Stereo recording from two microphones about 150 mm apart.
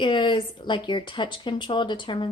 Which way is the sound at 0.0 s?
30° left (ahead or behind).